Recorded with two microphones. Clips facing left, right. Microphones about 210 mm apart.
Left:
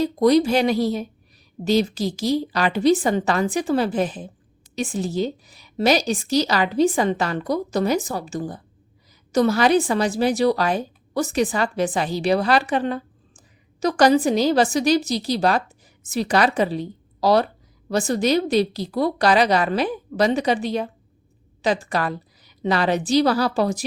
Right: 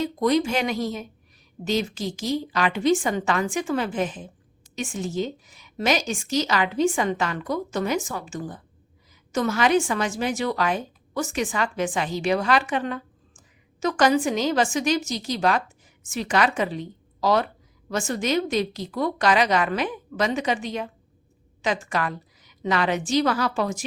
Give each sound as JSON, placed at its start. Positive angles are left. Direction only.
{"t": 0.0, "sound": "a woman's voice", "side_deg": 35}